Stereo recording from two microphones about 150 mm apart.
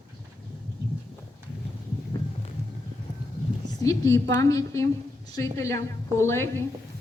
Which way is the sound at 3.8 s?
20° left (ahead or behind).